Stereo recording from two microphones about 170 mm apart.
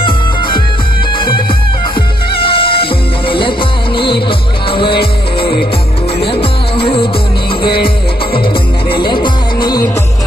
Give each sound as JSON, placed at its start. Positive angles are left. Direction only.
{"t": 0.0, "sound": "music", "side_deg": 30}
{"t": 2.4, "sound": "music", "side_deg": 30}
{"t": 8.9, "sound": "music", "side_deg": 30}